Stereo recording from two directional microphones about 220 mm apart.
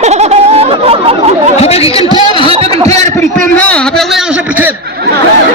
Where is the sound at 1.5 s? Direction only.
30° left (ahead or behind).